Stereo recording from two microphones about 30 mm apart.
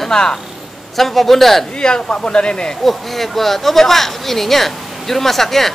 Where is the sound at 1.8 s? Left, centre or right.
Left.